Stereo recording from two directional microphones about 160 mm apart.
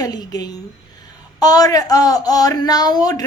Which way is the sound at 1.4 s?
25° left (ahead or behind).